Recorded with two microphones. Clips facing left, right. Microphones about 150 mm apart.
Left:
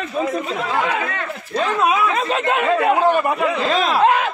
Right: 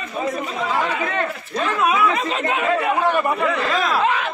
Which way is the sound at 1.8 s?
30° left (ahead or behind).